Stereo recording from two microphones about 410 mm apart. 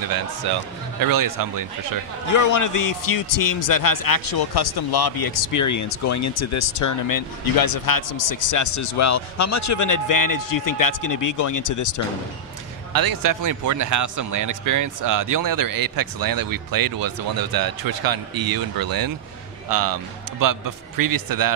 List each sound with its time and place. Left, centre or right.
0.1 s speech: right
1.0 s speech: right
2.3 s a man's voice: left
12.9 s speech: right